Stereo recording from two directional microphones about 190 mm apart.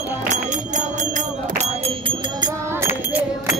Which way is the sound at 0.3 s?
40° right (ahead or behind).